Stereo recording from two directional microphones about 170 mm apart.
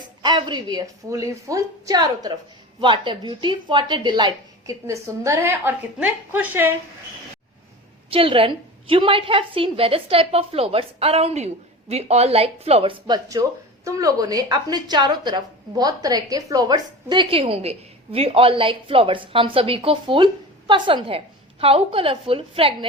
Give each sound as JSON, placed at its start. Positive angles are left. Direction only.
{"t": 0.2, "sound": "a woman's voice", "side_deg": -25}
{"t": 8.1, "sound": "a woman's voice", "side_deg": -35}